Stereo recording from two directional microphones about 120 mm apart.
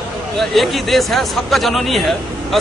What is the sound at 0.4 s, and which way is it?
Speech, centre (ahead or behind).